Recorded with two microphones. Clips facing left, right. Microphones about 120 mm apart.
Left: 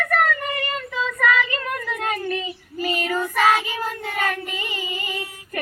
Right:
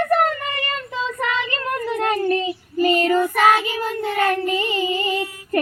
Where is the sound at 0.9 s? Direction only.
30° right (ahead or behind).